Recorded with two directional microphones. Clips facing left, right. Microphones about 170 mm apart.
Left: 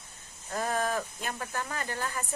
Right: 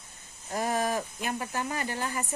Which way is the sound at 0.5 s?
15° right (ahead or behind).